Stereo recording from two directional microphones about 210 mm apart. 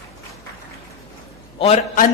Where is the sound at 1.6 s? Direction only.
30° left (ahead or behind).